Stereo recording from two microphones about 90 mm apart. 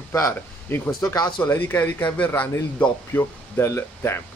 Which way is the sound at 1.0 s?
40° left (ahead or behind).